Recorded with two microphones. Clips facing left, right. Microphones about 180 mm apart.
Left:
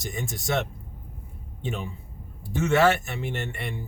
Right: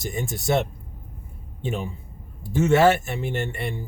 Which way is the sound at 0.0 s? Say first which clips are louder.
Right 4 dB; 30° right (ahead or behind).